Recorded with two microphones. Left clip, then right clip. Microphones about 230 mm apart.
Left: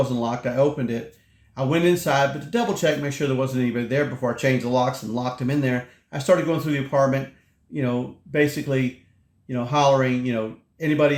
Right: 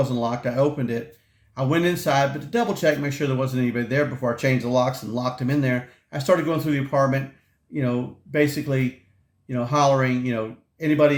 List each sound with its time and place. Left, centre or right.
0.0 s speech: centre